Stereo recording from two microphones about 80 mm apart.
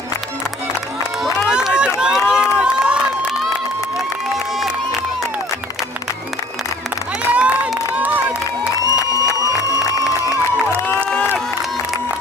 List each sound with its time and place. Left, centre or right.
1.2 s run: centre
7.3 s crowd: centre
8.8 s crowd: left
9.7 s music: left